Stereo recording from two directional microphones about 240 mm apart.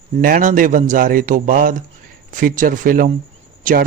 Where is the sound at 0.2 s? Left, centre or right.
Right.